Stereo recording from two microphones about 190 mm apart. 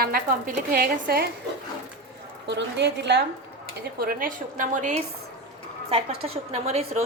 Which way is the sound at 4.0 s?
50° right (ahead or behind).